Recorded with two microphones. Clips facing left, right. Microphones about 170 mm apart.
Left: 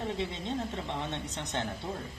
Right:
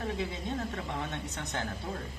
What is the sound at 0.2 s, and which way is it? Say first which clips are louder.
Speech: left 1 dB; 25° left (ahead or behind).